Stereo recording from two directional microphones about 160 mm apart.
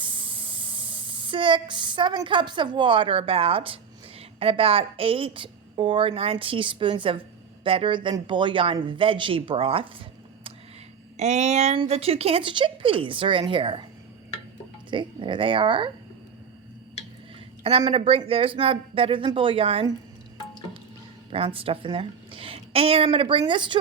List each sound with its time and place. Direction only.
0.0 s a woman's voice: 30° right (ahead or behind)
11.2 s a woman's voice: 45° right (ahead or behind)
14.8 s speech: 30° right (ahead or behind)
17.6 s a woman's voice: 35° right (ahead or behind)
21.3 s a woman's voice: 35° right (ahead or behind)